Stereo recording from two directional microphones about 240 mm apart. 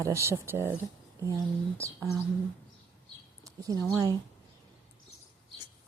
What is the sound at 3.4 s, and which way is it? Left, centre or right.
Speech, centre.